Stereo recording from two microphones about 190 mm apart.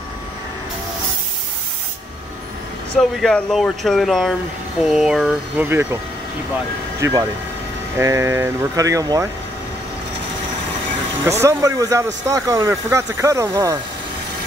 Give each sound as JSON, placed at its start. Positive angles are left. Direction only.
{"t": 3.0, "sound": "speech", "side_deg": 5}
{"t": 5.7, "sound": "speech", "side_deg": -10}
{"t": 7.0, "sound": "speech", "side_deg": -15}
{"t": 11.4, "sound": "speech", "side_deg": -15}